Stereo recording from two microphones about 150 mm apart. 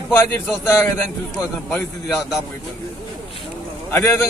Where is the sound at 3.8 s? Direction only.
15° left (ahead or behind).